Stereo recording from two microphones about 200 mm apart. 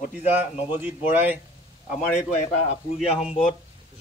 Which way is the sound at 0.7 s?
10° right (ahead or behind).